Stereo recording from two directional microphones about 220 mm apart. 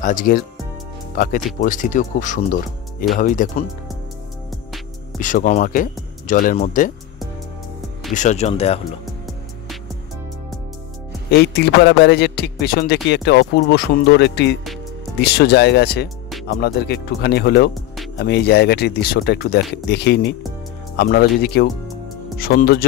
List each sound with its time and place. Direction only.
0.0 s speech: 40° left (ahead or behind)
5.2 s speech: 35° left (ahead or behind)
8.1 s speech: 35° left (ahead or behind)
11.2 s a man's voice: 50° left (ahead or behind)